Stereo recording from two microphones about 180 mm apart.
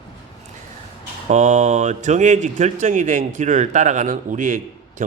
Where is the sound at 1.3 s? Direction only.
40° right (ahead or behind).